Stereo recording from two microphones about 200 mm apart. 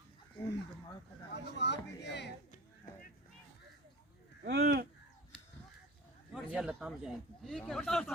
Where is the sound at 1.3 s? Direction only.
60° left (ahead or behind).